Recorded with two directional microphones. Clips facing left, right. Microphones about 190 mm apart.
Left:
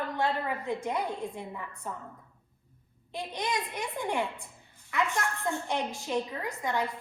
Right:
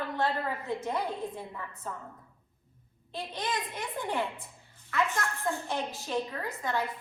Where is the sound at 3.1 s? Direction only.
15° left (ahead or behind).